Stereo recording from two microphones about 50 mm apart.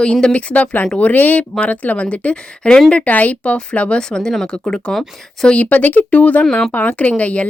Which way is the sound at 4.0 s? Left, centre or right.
Centre.